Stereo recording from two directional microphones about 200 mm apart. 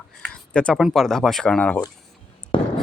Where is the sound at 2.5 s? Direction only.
25° left (ahead or behind).